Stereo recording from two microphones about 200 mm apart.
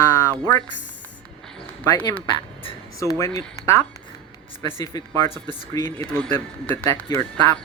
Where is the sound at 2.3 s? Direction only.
20° left (ahead or behind).